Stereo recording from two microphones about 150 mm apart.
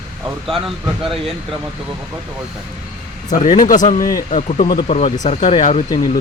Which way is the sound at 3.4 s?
60° left (ahead or behind).